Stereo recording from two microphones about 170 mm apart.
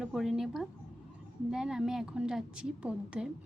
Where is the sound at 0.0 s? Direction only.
5° right (ahead or behind).